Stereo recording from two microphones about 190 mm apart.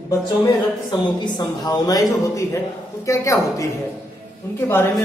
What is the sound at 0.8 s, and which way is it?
Speech, 20° left (ahead or behind).